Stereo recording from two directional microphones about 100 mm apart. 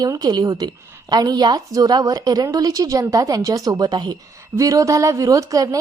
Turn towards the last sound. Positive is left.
turn(degrees=-35)  # may be behind; listen again after turning